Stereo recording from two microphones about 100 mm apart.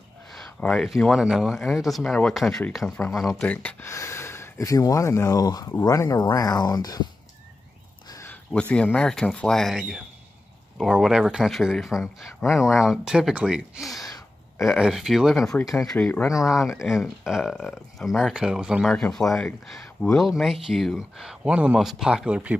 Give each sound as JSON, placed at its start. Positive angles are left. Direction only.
{"t": 0.3, "sound": "a sound", "side_deg": 5}
{"t": 0.8, "sound": "speech", "side_deg": 0}
{"t": 3.4, "sound": "speech", "side_deg": 15}
{"t": 8.6, "sound": "speech", "side_deg": 15}
{"t": 16.0, "sound": "speech", "side_deg": 15}
{"t": 16.4, "sound": "speech", "side_deg": 0}
{"t": 19.3, "sound": "speech", "side_deg": 5}